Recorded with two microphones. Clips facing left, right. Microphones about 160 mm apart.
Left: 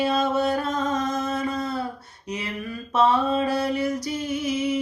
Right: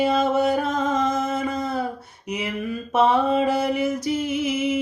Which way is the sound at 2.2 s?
20° right (ahead or behind).